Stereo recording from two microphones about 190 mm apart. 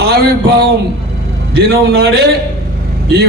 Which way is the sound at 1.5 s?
55° right (ahead or behind).